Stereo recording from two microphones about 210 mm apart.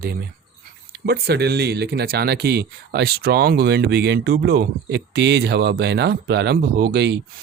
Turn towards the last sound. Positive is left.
turn(degrees=-55)  # may be behind; listen again after turning